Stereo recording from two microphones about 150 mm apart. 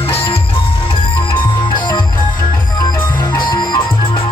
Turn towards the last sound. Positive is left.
turn(degrees=30)  # may be behind; listen again after turning